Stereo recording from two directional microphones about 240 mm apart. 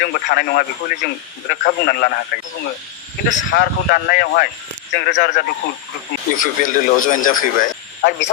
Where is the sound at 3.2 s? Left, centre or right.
Left.